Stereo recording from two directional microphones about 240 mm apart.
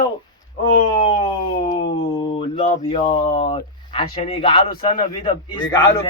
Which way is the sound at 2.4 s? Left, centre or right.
Left.